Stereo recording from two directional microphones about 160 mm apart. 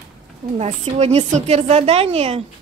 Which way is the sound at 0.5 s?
40° right (ahead or behind).